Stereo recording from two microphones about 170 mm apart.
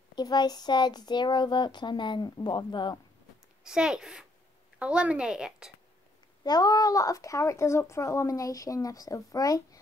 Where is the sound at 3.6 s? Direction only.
5° right (ahead or behind).